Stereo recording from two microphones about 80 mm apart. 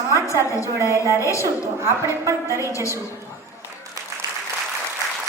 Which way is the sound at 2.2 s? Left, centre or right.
Right.